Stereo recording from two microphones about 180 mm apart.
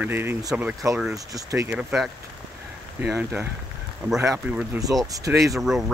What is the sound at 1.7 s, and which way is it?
Speech, centre (ahead or behind).